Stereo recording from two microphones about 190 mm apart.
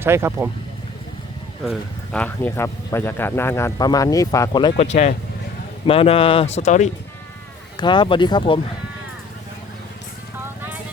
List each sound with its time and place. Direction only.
0.0 s speech: 15° right (ahead or behind)
1.6 s speech: centre (ahead or behind); by 4.9 s 25° left (ahead or behind)
4.9 s speech: 35° left (ahead or behind)
7.8 s speech: 25° left (ahead or behind)